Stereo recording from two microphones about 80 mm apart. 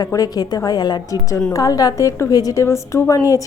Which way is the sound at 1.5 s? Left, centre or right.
Left.